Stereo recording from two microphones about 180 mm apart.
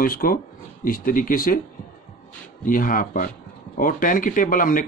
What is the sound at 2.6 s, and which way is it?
Speech, 50° left (ahead or behind).